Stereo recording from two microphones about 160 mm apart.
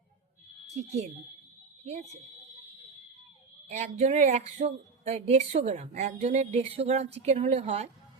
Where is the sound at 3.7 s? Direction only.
45° right (ahead or behind).